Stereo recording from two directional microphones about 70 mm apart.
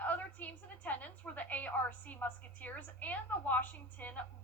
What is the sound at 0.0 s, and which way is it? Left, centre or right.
A woman's voice, left.